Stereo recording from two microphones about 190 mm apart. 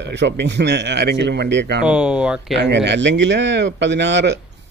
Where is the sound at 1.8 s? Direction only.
5° right (ahead or behind).